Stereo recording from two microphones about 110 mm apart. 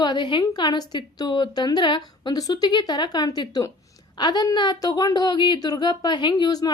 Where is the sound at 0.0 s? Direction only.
45° left (ahead or behind).